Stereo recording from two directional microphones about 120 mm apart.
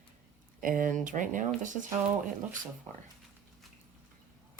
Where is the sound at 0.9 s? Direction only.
90° right.